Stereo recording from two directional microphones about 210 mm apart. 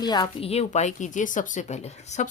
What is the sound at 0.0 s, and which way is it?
Speech, 20° left (ahead or behind).